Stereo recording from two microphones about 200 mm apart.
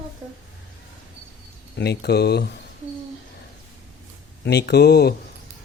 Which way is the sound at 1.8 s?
55° left (ahead or behind).